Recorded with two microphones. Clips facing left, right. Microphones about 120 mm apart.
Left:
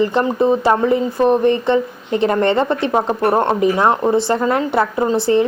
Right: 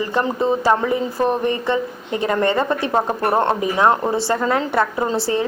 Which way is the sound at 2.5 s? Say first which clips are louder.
Left 3 dB; 20° left (ahead or behind).